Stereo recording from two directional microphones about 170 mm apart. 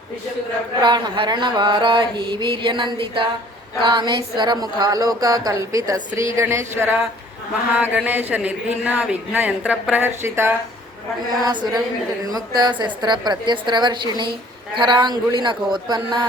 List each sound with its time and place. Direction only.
0.8 s mantra: 25° right (ahead or behind)
6.3 s speech: 15° right (ahead or behind)
11.3 s mantra: 25° right (ahead or behind)